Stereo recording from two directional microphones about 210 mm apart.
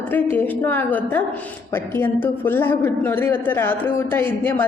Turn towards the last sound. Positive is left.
turn(degrees=10)  # may be behind; listen again after turning